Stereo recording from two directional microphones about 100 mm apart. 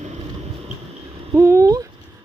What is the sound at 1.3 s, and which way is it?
Speech, 30° right (ahead or behind).